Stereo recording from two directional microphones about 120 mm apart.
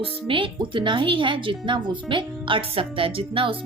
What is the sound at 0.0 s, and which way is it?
Speech, 45° right (ahead or behind).